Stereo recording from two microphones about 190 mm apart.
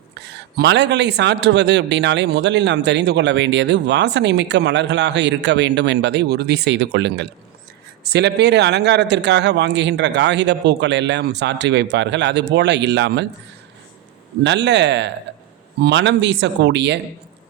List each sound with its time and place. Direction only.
0.2 s a man's voice: 60° right (ahead or behind)
14.4 s speech: 65° right (ahead or behind)